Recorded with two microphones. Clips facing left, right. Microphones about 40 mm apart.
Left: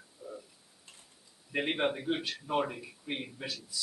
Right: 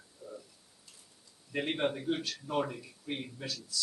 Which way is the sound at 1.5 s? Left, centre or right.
Centre.